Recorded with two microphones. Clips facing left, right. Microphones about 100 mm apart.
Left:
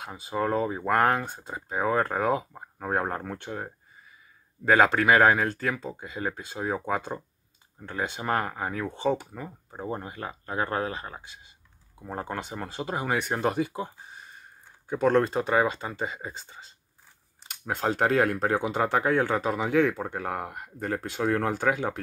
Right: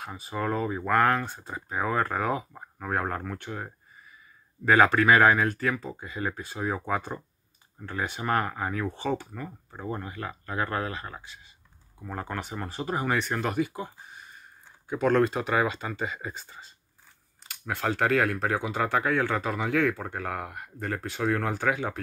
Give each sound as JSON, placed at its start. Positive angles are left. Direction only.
{"t": 0.0, "sound": "speech", "side_deg": 20}
{"t": 14.9, "sound": "speech", "side_deg": 35}